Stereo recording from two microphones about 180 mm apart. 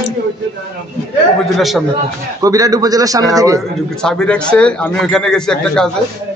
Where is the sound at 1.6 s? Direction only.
Centre (ahead or behind).